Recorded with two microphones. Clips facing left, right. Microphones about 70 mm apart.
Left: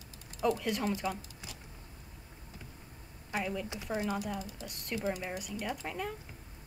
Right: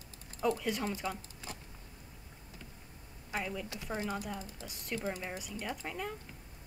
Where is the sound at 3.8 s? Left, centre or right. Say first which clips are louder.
Left 3 dB; centre.